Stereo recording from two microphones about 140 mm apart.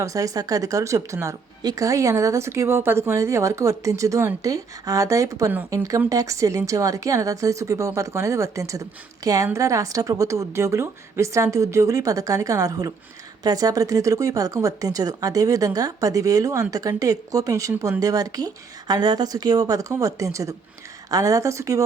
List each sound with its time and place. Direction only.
0.0 s a woman's voice: 25° right (ahead or behind)